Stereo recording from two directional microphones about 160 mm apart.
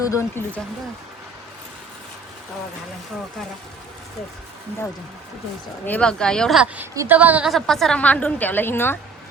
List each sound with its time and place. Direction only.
0.0 s a woman's voice: 20° left (ahead or behind)
5.8 s speech: 10° left (ahead or behind)
6.9 s a woman's voice: 15° right (ahead or behind)
7.5 s a woman's voice: centre (ahead or behind)